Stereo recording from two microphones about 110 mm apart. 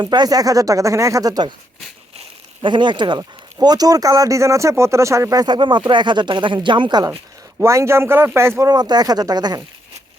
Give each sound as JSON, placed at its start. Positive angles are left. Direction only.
{"t": 0.0, "sound": "speech", "side_deg": -40}
{"t": 2.6, "sound": "speech", "side_deg": -45}
{"t": 7.6, "sound": "speech", "side_deg": -25}